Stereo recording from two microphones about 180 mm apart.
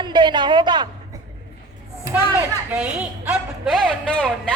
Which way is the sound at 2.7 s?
10° right (ahead or behind).